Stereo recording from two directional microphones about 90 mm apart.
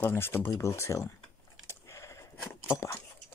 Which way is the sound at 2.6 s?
25° left (ahead or behind).